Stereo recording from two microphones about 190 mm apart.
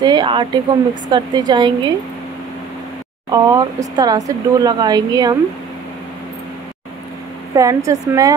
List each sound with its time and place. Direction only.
0.0 s speech: 25° right (ahead or behind)
3.3 s speech: 20° right (ahead or behind)
7.5 s speech: 15° right (ahead or behind)